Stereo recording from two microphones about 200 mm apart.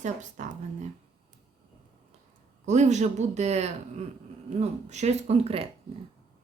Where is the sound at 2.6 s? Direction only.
35° right (ahead or behind).